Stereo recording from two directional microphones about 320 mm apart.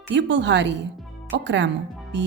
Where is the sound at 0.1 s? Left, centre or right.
Right.